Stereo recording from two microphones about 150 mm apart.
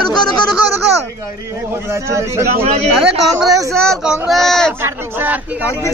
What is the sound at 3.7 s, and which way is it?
Speech, centre (ahead or behind).